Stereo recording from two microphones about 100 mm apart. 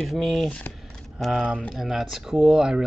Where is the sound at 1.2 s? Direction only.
10° right (ahead or behind).